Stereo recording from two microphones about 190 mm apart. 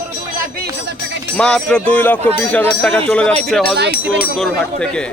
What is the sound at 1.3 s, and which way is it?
A man's voice, 5° left (ahead or behind).